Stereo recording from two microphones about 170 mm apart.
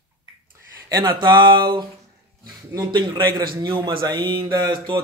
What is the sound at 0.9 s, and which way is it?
Speech, 25° right (ahead or behind).